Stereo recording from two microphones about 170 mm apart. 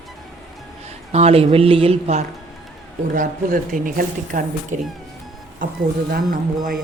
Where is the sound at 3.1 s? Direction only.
50° right (ahead or behind).